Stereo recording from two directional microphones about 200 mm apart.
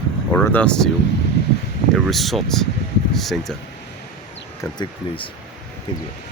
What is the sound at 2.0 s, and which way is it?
Speech, centre (ahead or behind).